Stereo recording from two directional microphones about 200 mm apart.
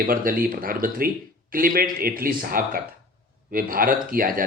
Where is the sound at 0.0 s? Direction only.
45° right (ahead or behind).